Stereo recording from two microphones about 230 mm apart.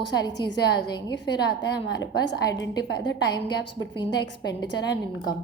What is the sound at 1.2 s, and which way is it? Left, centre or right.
A woman's voice, left.